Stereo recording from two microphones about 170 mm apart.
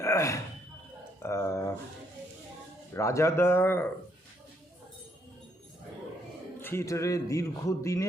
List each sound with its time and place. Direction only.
0.0 s a sound: 15° left (ahead or behind)
1.2 s speech: 15° left (ahead or behind)
2.9 s speech: 15° left (ahead or behind)
6.6 s speech: 15° left (ahead or behind)